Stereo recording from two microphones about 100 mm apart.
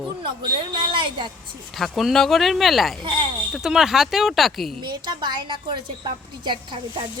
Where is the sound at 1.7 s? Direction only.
Centre (ahead or behind).